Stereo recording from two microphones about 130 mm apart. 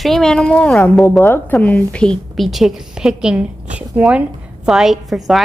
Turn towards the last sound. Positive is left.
turn(degrees=0)  # may be behind; listen again after turning